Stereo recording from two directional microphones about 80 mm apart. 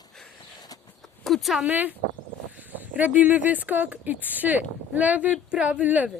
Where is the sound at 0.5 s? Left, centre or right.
Left.